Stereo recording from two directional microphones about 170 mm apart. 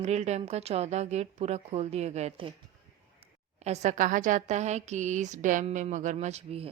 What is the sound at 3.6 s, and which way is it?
A woman's voice, 40° right (ahead or behind).